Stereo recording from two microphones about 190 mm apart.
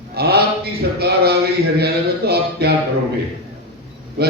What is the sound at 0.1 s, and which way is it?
Mantra, 55° right (ahead or behind).